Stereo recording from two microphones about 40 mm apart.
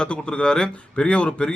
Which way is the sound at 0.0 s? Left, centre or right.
Left.